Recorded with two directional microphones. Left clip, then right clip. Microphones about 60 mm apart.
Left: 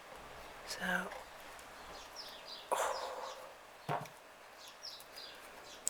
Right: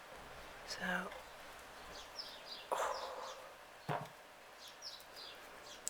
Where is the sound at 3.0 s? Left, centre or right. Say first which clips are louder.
Left 3 dB; centre.